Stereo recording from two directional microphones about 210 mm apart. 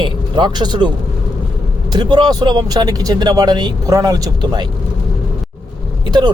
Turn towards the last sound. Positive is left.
turn(degrees=-20)  # may be behind; listen again after turning